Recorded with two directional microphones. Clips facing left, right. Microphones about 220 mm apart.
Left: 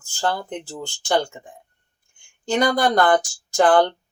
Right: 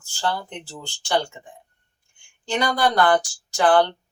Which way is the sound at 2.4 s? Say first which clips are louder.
Left 3 dB; 45° left (ahead or behind).